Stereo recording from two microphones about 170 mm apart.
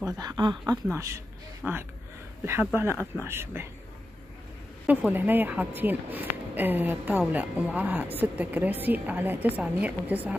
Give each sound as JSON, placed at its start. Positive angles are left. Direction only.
{"t": 0.0, "sound": "speech", "side_deg": -20}
{"t": 1.6, "sound": "speech", "side_deg": -5}
{"t": 4.8, "sound": "speech", "side_deg": -10}